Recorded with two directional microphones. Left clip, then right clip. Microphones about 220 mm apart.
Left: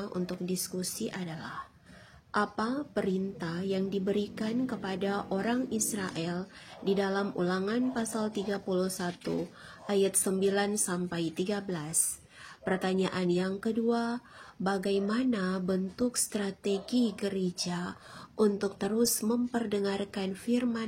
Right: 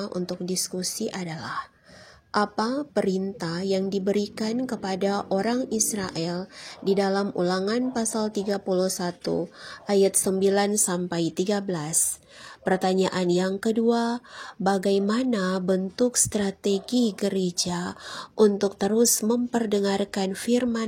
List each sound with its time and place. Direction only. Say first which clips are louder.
0.0 s a woman's voice: right 6 dB; 25° right (ahead or behind)